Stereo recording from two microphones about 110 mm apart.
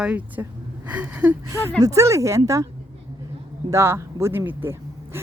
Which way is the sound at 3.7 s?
25° right (ahead or behind).